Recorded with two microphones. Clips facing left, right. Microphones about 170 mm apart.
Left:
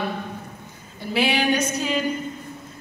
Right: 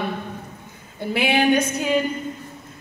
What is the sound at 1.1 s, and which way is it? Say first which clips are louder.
Speech: right 3 dB; 55° right (ahead or behind).